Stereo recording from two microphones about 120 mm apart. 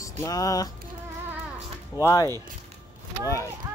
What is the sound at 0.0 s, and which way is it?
Music, 30° left (ahead or behind).